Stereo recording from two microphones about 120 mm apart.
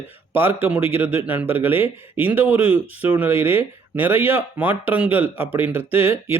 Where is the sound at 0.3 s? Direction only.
20° right (ahead or behind).